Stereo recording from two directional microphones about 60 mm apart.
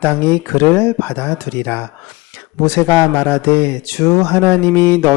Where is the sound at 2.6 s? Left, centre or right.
Left.